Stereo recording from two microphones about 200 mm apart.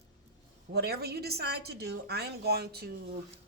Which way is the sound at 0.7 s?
55° right (ahead or behind).